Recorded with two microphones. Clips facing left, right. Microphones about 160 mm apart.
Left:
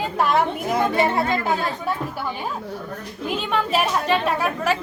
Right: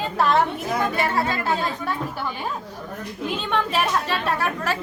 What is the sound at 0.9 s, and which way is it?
Speech, 25° left (ahead or behind).